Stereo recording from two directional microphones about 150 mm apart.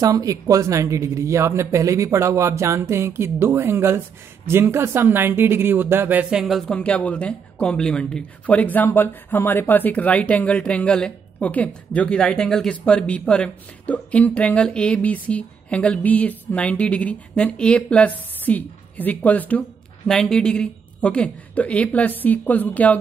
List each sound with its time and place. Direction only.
0.0 s speech: 25° right (ahead or behind)
6.4 s a woman's voice: 5° left (ahead or behind)